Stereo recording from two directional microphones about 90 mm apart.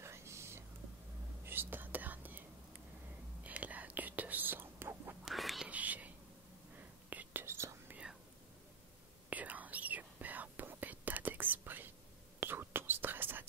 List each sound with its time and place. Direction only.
0.0 s whispering: 30° right (ahead or behind)
3.4 s whispering: 15° right (ahead or behind)
5.2 s whispering: centre (ahead or behind)
5.7 s whispering: 15° right (ahead or behind)
9.3 s whispering: 15° right (ahead or behind)